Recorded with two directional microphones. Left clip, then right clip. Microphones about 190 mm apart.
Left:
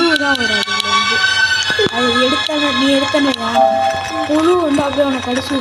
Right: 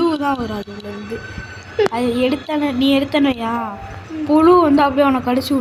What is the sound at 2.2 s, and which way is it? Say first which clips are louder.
Speech: left 4 dB; 5° left (ahead or behind).